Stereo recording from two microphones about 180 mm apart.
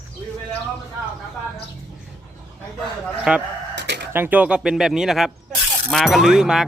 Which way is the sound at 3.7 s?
70° right (ahead or behind).